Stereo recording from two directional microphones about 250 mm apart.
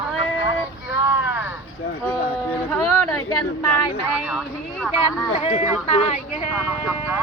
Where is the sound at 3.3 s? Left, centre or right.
Left.